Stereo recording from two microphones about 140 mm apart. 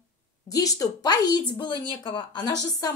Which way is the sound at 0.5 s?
25° left (ahead or behind).